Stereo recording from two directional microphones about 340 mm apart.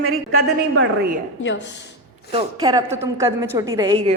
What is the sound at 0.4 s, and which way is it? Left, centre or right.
Speech, right.